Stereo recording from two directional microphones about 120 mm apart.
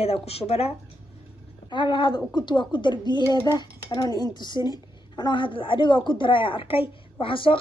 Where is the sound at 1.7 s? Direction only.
40° left (ahead or behind).